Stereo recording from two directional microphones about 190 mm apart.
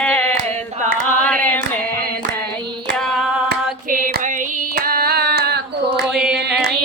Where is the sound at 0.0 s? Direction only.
5° left (ahead or behind).